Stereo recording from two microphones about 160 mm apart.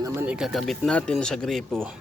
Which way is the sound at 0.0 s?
15° right (ahead or behind).